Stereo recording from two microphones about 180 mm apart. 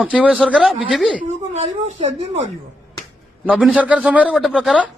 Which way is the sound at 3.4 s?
5° right (ahead or behind).